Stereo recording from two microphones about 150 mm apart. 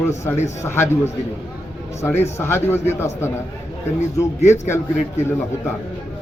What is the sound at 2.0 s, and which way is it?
Speech, 15° left (ahead or behind).